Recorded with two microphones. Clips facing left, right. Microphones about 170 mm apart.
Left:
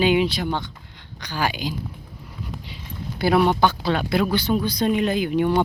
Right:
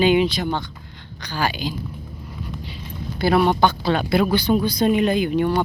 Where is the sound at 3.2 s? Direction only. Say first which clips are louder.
Right 1 dB; 10° left (ahead or behind).